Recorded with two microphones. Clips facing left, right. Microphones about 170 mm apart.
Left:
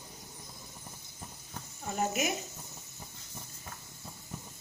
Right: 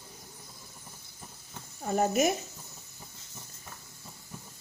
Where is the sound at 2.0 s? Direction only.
40° right (ahead or behind).